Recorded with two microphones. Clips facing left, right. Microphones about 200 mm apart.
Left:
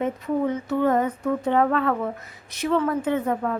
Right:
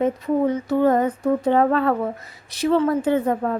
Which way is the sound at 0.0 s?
35° right (ahead or behind).